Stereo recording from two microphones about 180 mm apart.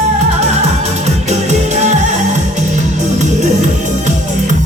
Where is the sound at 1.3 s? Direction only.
40° right (ahead or behind).